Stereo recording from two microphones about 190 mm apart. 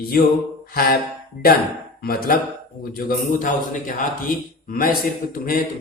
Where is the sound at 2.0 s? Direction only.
50° left (ahead or behind).